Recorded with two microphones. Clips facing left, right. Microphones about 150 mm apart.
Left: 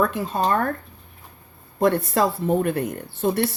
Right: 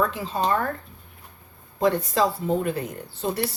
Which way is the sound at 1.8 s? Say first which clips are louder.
Left 2 dB; 60° left (ahead or behind).